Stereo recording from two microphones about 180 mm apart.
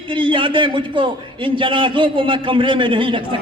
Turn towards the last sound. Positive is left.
turn(degrees=-30)  # may be behind; listen again after turning